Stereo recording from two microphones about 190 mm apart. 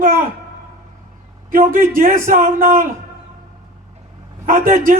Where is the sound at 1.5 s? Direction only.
45° right (ahead or behind).